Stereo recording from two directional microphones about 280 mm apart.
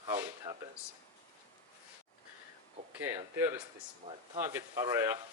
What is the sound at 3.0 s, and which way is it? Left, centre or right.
Speech, centre.